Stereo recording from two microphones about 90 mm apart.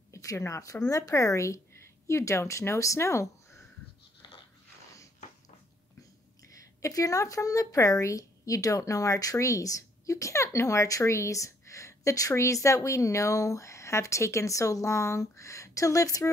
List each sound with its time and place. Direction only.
0.1 s speech: 35° left (ahead or behind)
4.2 s a sound: 60° left (ahead or behind)
6.4 s a woman's voice: 40° left (ahead or behind)